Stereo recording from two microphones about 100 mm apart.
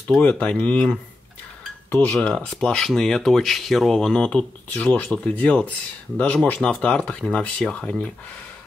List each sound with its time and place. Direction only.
0.2 s speech: 15° left (ahead or behind)